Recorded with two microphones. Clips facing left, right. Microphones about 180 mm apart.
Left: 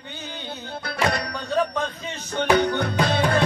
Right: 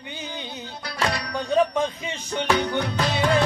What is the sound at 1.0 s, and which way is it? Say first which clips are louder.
Music: left 2 dB; 55° left (ahead or behind).